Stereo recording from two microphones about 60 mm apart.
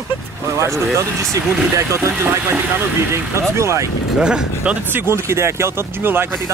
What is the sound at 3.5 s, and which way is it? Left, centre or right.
Speech, right.